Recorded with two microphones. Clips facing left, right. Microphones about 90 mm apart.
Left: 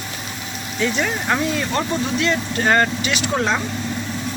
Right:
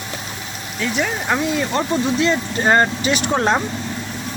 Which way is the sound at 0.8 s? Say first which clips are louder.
Even; 5° right (ahead or behind).